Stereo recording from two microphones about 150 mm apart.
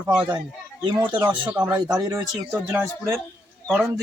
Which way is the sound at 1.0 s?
30° right (ahead or behind).